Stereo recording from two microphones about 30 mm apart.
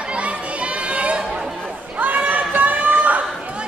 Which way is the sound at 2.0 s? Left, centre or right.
Right.